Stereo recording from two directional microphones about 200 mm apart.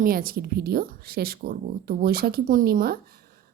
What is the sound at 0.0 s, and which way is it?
A woman's voice, 45° right (ahead or behind).